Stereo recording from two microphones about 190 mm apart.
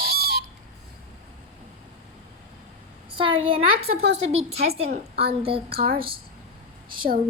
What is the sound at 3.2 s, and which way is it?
A child's voice, 25° right (ahead or behind).